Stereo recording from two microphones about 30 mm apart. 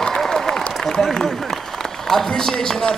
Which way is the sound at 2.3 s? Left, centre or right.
Centre.